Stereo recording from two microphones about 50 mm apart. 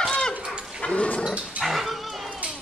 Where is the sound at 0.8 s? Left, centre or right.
Left.